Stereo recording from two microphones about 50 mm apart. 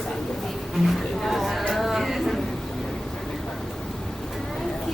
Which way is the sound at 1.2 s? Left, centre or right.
Centre.